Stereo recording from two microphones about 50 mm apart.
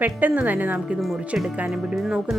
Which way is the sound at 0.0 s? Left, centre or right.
Right.